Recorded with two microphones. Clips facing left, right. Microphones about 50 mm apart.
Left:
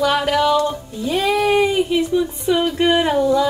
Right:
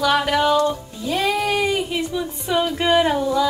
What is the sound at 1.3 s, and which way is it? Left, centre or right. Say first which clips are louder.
Speech: left 6 dB; centre.